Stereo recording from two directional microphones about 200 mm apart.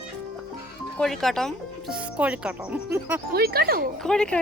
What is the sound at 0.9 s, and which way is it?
Speech, centre (ahead or behind).